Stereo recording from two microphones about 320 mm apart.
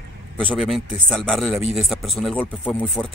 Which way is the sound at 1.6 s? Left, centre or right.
Centre.